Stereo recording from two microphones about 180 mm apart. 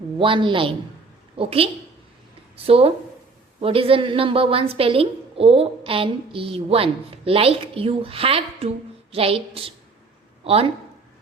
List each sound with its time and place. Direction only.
0.2 s a woman's voice: 30° right (ahead or behind)